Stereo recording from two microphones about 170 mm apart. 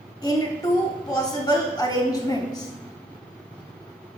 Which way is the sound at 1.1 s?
20° left (ahead or behind).